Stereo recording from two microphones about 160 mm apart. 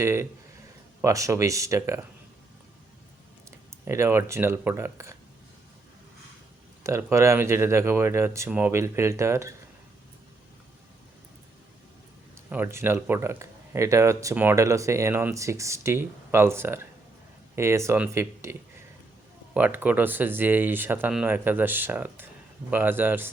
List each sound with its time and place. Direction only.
0.0 s speech: 15° right (ahead or behind)
3.8 s speech: 15° right (ahead or behind)
6.8 s speech: 20° right (ahead or behind)
12.5 s speech: 15° right (ahead or behind)
19.5 s speech: 10° right (ahead or behind)